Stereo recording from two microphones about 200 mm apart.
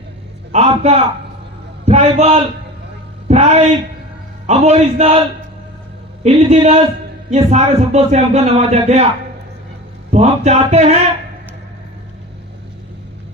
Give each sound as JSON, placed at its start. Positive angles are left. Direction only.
{"t": 0.5, "sound": "a man's voice", "side_deg": -30}
{"t": 6.2, "sound": "speech", "side_deg": -30}
{"t": 10.1, "sound": "speech", "side_deg": -35}